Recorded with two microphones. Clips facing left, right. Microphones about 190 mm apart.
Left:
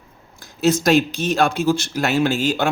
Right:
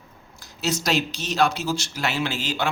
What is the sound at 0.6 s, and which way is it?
Speech, 50° left (ahead or behind).